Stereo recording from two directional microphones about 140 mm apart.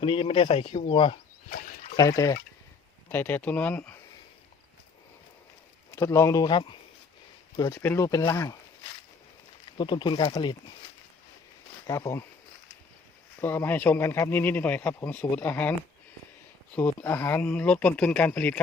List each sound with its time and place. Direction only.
0.0 s speech: 40° left (ahead or behind)
2.0 s speech: 25° left (ahead or behind)
5.9 s speech: 20° left (ahead or behind)
9.7 s speech: 35° left (ahead or behind)
11.9 s speech: 25° left (ahead or behind)
13.4 s speech: 15° left (ahead or behind)
16.7 s speech: 10° left (ahead or behind)